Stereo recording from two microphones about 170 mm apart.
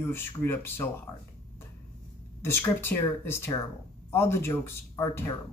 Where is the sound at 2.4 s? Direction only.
15° left (ahead or behind).